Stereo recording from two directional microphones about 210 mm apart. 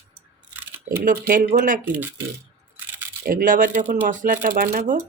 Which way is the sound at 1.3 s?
40° right (ahead or behind).